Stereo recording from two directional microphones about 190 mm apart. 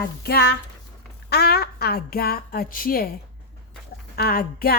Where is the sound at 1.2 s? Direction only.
55° left (ahead or behind).